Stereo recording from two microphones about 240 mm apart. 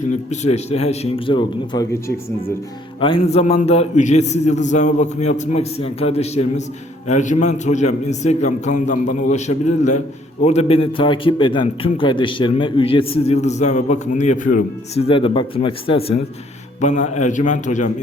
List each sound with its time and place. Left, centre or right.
0.1 s a man's voice: left
3.0 s a man's voice: left